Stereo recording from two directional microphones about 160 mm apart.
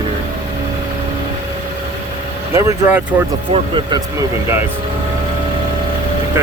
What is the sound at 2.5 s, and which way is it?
Speech, 10° right (ahead or behind).